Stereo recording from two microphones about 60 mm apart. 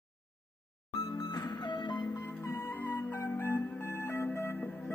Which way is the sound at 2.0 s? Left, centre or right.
Left.